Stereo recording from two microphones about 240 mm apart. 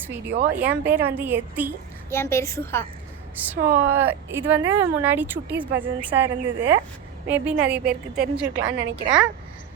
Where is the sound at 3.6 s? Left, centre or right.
Right.